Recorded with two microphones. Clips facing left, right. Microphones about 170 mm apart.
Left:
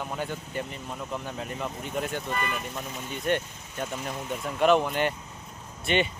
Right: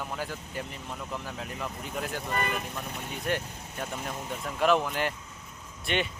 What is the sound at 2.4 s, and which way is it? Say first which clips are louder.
Speech: even; 55° right (ahead or behind).